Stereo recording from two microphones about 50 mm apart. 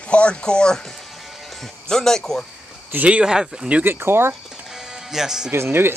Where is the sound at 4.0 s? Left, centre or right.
Right.